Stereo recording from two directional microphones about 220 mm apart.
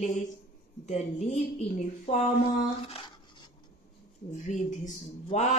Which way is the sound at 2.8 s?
25° left (ahead or behind).